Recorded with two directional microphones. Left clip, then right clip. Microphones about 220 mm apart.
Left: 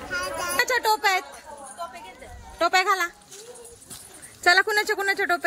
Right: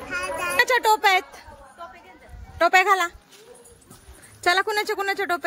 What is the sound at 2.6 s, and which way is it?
Speech, 10° right (ahead or behind).